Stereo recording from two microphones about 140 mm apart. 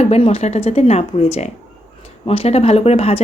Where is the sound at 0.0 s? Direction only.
50° left (ahead or behind).